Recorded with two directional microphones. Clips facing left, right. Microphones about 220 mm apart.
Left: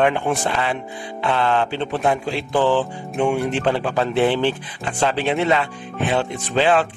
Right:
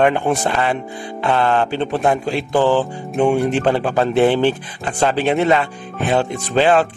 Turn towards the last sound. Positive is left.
turn(degrees=-45)  # may be behind; listen again after turning